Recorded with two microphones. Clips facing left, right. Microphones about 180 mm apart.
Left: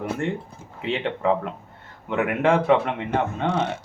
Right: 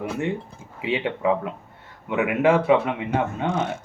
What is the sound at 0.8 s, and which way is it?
Speech, 5° right (ahead or behind).